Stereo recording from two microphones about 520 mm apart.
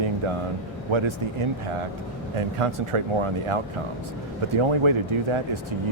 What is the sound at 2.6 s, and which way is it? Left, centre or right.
Speech, right.